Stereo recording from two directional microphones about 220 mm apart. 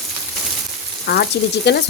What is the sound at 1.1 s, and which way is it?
Frying, 45° left (ahead or behind).